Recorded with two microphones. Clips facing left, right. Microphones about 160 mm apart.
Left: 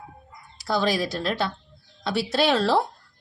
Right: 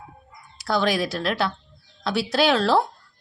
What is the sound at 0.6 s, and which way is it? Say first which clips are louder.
A woman's voice: right 1 dB; centre (ahead or behind).